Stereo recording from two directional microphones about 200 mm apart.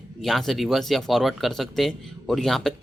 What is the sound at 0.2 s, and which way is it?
Speech, centre (ahead or behind).